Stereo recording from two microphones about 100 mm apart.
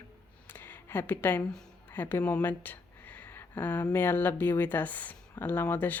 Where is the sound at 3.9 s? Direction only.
20° left (ahead or behind).